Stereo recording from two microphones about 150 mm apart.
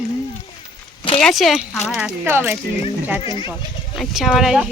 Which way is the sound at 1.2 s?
Centre (ahead or behind).